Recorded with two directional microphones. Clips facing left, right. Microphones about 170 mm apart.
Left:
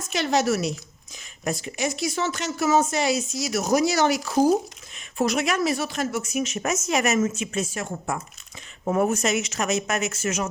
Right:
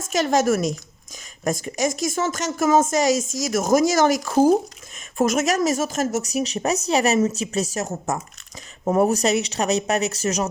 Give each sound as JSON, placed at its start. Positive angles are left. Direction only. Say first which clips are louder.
{"t": 0.1, "sound": "speech", "louder": "right 3 dB", "side_deg": -45}